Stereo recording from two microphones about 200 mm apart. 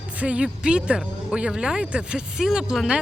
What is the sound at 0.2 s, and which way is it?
Speech, 5° right (ahead or behind).